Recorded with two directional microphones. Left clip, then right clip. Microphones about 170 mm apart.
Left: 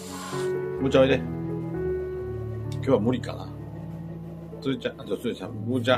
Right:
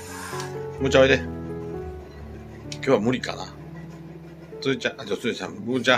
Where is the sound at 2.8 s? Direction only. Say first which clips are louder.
Right 2 dB; 10° right (ahead or behind).